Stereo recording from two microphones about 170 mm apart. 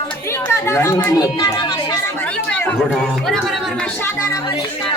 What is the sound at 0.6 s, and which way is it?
Speech, 15° left (ahead or behind).